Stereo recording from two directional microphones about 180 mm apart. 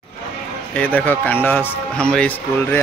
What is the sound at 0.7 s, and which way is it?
A man's voice, 10° left (ahead or behind).